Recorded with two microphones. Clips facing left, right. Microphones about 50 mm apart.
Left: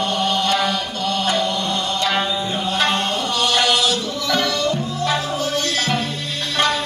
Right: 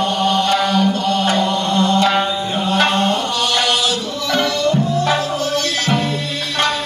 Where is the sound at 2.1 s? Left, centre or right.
Centre.